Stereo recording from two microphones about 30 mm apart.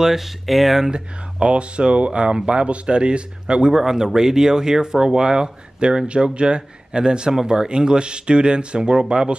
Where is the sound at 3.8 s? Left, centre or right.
Centre.